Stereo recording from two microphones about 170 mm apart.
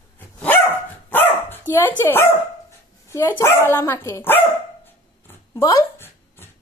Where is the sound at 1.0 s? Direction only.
10° left (ahead or behind).